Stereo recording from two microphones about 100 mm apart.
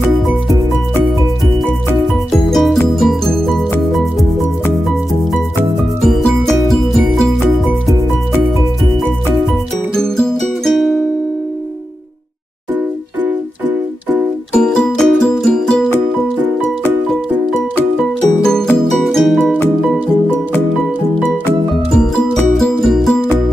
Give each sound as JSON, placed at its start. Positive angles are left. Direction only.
{"t": 2.4, "sound": "music", "side_deg": 0}
{"t": 6.0, "sound": "music", "side_deg": 5}
{"t": 9.9, "sound": "music", "side_deg": 5}
{"t": 14.5, "sound": "music", "side_deg": 5}
{"t": 18.4, "sound": "music", "side_deg": 5}
{"t": 21.5, "sound": "music", "side_deg": 5}